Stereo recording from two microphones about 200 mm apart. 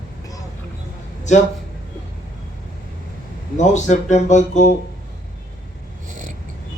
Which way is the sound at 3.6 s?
35° left (ahead or behind).